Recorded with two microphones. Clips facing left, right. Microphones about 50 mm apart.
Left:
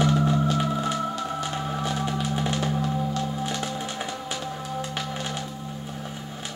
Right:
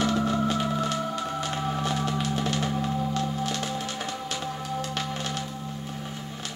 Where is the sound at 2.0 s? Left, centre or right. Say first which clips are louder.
Left 1 dB; centre.